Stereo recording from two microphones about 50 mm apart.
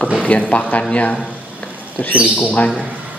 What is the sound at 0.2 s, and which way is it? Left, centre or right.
Speech, left.